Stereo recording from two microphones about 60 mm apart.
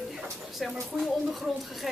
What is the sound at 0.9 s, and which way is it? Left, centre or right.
Speech, centre.